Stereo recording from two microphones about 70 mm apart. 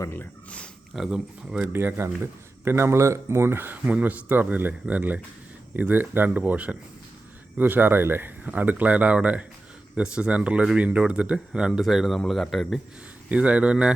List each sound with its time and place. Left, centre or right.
0.9 s speech: centre
1.6 s speech: right; by 12.8 s centre
13.2 s speech: centre